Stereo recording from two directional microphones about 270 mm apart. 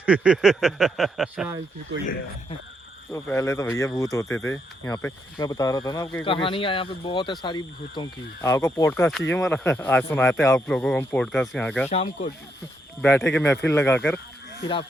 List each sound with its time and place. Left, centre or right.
0.0 s a man's voice: centre
3.1 s a man's voice: centre
11.9 s speech: left
13.0 s speech: centre